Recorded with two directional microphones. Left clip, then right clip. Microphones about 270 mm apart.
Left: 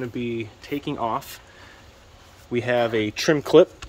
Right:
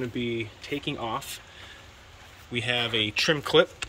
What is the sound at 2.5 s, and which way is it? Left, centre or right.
Speech, centre.